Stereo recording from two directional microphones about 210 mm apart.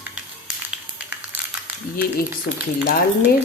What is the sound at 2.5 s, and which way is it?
Speech, 40° left (ahead or behind).